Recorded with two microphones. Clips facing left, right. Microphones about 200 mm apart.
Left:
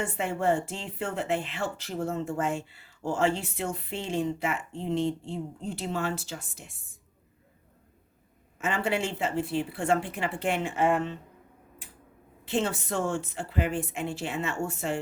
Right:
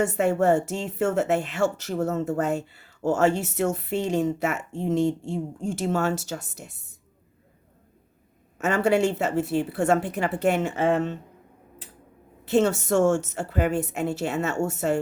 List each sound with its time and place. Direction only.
0.2 s speech: 45° right (ahead or behind)
8.5 s speech: 40° right (ahead or behind)
12.5 s speech: 45° right (ahead or behind)